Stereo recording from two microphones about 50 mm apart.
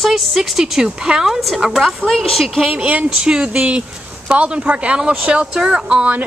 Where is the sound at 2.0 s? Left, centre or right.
Centre.